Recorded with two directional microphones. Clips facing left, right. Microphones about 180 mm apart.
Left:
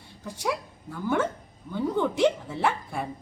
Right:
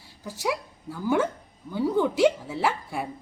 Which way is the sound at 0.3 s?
5° right (ahead or behind).